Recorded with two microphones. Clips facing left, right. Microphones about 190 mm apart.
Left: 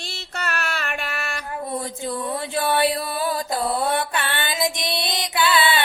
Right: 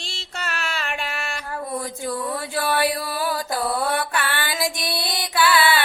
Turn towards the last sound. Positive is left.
turn(degrees=20)  # may be behind; listen again after turning